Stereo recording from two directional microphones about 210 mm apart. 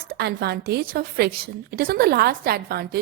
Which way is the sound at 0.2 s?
50° right (ahead or behind).